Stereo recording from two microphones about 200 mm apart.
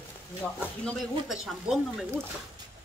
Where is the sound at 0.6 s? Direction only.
Centre (ahead or behind).